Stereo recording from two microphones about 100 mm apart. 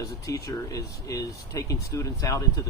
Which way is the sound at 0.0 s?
35° left (ahead or behind).